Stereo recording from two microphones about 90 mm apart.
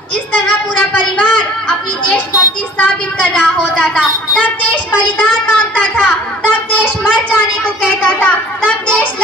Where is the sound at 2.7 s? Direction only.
15° left (ahead or behind).